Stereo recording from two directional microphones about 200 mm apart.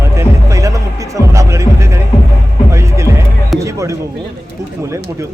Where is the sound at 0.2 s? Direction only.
15° right (ahead or behind).